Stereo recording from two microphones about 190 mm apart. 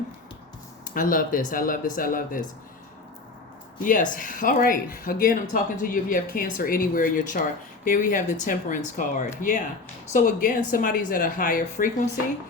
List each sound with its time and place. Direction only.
0.9 s speech: 45° left (ahead or behind)
3.8 s speech: 45° left (ahead or behind)